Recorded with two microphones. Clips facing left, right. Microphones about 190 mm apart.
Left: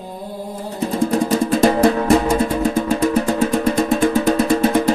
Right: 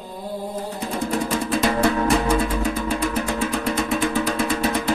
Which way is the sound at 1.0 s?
40° left (ahead or behind).